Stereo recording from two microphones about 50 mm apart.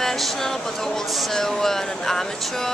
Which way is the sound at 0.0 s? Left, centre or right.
Centre.